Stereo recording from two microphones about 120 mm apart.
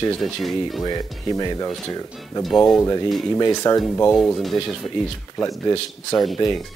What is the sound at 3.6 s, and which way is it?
Speech, 30° left (ahead or behind).